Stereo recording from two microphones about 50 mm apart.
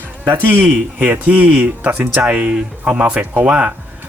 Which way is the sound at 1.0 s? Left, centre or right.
Right.